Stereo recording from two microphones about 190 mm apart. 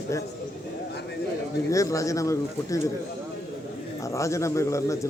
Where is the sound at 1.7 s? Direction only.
15° left (ahead or behind).